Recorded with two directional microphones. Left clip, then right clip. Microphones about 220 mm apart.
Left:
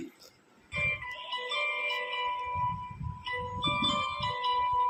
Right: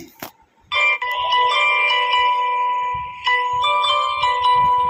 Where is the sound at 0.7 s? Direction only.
40° right (ahead or behind).